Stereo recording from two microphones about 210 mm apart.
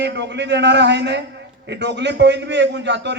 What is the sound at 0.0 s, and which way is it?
A man's voice, 55° right (ahead or behind).